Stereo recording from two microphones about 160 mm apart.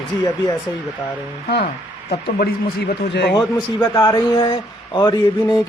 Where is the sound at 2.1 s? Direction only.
70° left (ahead or behind); by 3.3 s 90° left.